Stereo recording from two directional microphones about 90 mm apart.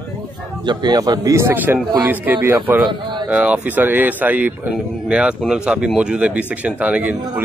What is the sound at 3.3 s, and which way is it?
Speech, 15° right (ahead or behind).